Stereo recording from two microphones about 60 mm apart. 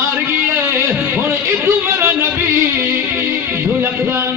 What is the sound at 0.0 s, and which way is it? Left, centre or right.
Music, right.